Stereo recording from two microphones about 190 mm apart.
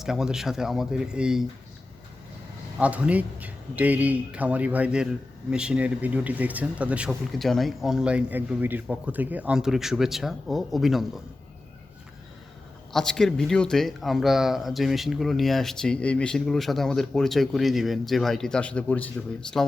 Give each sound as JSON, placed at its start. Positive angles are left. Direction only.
{"t": 0.0, "sound": "speech", "side_deg": 0}
{"t": 2.7, "sound": "speech", "side_deg": -5}
{"t": 12.9, "sound": "speech", "side_deg": 5}